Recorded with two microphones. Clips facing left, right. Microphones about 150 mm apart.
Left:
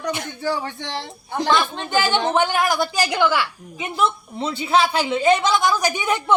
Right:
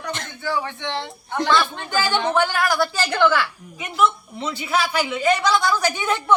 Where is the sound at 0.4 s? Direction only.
35° left (ahead or behind).